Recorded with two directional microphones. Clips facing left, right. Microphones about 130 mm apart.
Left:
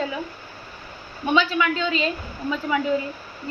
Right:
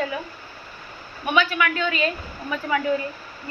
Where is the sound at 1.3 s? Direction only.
25° left (ahead or behind).